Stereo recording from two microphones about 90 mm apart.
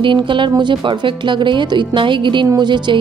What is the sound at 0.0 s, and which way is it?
Speech, 65° right (ahead or behind).